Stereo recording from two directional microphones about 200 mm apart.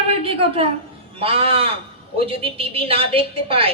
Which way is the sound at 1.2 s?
30° right (ahead or behind).